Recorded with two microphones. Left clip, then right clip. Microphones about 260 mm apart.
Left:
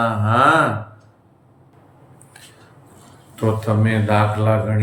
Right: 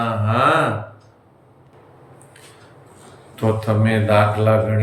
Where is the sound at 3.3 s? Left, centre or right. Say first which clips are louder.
Right 1 dB; centre.